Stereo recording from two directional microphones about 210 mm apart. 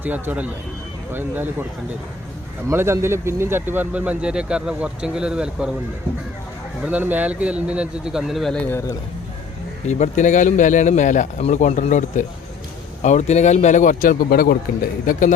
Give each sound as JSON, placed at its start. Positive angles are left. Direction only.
{"t": 0.0, "sound": "speech", "side_deg": -10}
{"t": 2.6, "sound": "speech", "side_deg": -15}
{"t": 6.8, "sound": "speech", "side_deg": -10}
{"t": 9.8, "sound": "a man's voice", "side_deg": 35}